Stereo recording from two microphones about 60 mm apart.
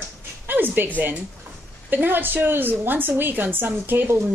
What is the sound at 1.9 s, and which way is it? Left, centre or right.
A woman's voice, right.